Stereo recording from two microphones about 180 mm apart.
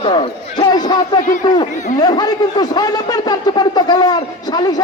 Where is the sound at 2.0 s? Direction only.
20° left (ahead or behind).